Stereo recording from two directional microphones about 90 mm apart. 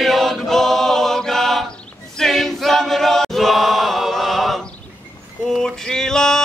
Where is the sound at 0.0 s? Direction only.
Centre (ahead or behind).